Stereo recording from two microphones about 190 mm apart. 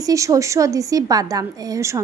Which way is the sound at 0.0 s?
15° right (ahead or behind).